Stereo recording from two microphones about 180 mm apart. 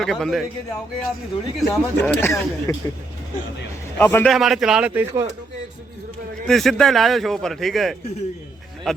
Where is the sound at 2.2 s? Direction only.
15° left (ahead or behind).